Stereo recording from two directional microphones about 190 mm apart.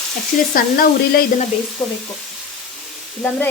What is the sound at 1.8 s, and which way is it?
Frying, 10° left (ahead or behind).